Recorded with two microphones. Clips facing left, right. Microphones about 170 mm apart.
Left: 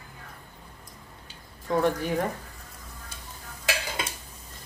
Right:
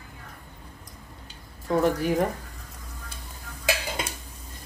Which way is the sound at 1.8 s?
5° right (ahead or behind).